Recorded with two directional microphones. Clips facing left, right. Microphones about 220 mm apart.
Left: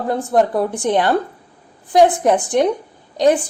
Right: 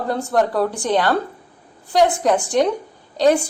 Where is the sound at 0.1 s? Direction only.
20° left (ahead or behind).